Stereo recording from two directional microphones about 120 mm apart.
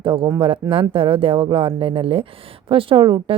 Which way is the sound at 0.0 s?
45° right (ahead or behind).